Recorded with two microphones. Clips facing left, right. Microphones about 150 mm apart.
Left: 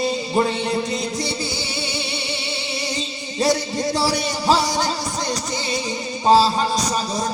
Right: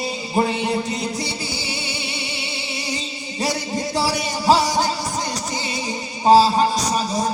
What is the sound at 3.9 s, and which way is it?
Music, 10° right (ahead or behind).